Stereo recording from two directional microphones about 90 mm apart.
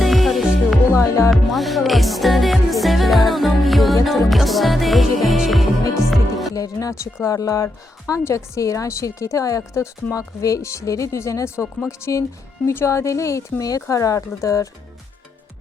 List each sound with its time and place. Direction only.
0.0 s music: centre (ahead or behind)
0.9 s music: 30° left (ahead or behind)
1.3 s music: centre (ahead or behind)
6.5 s music: 40° left (ahead or behind)
7.3 s a woman's voice: 40° left (ahead or behind)